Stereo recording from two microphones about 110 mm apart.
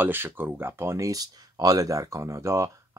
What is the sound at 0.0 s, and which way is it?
Speech, 20° right (ahead or behind).